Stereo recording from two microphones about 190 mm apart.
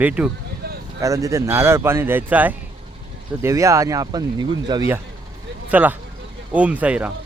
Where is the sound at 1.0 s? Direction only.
15° right (ahead or behind).